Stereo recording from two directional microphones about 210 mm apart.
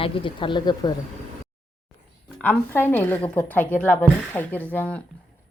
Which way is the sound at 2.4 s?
10° left (ahead or behind).